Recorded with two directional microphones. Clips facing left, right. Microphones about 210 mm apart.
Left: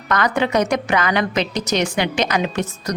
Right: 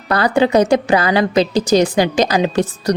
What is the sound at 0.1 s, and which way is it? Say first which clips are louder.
Speech: right 5 dB; 30° right (ahead or behind).